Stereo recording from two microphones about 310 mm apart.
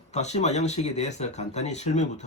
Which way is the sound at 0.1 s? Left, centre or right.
Left.